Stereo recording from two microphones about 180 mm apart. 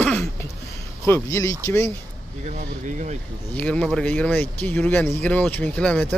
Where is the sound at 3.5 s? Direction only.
5° left (ahead or behind).